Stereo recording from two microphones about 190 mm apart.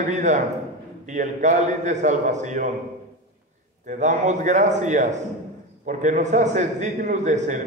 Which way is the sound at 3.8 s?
40° right (ahead or behind).